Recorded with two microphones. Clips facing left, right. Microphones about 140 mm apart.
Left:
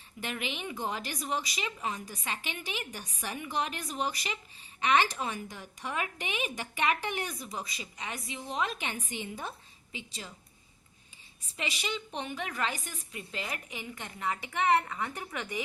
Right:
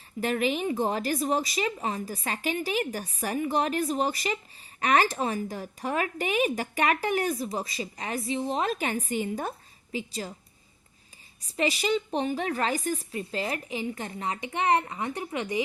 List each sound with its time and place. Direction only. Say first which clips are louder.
0.2 s speech: right 10 dB; 40° right (ahead or behind)
11.4 s a woman's voice: right 10 dB; 40° right (ahead or behind); by 15.4 s 15° right (ahead or behind)